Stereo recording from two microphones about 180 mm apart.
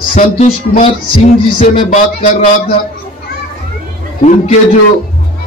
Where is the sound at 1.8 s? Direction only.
50° left (ahead or behind).